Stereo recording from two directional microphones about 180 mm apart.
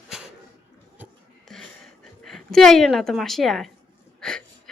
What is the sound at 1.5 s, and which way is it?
Music, centre (ahead or behind).